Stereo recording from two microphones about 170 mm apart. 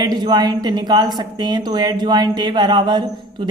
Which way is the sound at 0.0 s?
25° right (ahead or behind).